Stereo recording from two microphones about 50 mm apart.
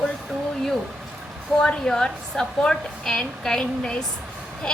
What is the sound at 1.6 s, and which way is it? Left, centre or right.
A woman's voice, centre.